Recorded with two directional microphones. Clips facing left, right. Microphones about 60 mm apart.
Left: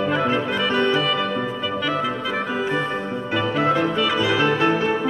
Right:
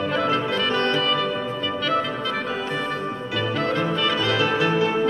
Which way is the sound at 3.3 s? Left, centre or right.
Centre.